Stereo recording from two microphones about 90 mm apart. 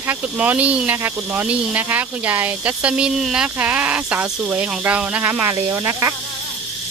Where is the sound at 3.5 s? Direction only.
15° right (ahead or behind).